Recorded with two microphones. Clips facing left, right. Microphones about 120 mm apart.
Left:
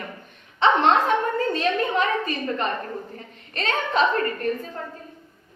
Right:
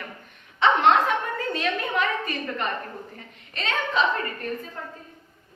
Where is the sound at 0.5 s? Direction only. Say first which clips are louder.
Left 1 dB; 30° left (ahead or behind).